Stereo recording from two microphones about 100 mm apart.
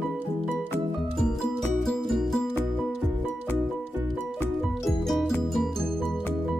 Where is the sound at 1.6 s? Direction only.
Centre (ahead or behind).